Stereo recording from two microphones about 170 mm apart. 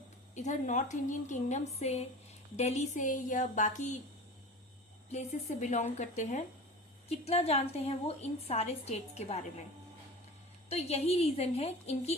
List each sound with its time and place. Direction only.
0.3 s a woman's voice: 45° left (ahead or behind)
5.1 s a woman's voice: 40° left (ahead or behind)
10.7 s a woman's voice: 40° left (ahead or behind)